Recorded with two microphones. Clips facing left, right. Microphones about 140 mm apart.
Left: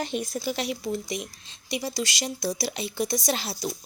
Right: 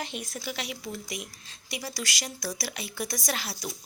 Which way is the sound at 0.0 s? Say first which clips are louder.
Left 7 dB; 30° left (ahead or behind).